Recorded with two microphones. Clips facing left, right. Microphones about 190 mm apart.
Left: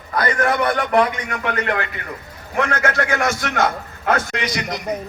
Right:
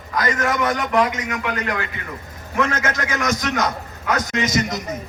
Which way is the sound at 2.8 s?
40° right (ahead or behind).